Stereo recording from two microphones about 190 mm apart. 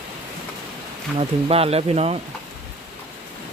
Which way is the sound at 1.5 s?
30° right (ahead or behind).